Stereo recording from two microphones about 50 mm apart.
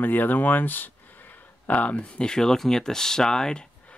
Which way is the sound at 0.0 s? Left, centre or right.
Left.